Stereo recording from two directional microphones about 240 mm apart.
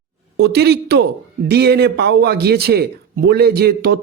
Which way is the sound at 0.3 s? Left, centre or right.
Right.